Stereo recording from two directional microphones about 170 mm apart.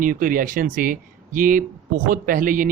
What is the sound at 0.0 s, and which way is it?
A man's voice, 55° right (ahead or behind).